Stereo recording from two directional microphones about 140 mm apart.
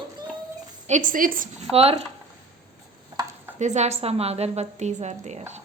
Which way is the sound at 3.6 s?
55° right (ahead or behind).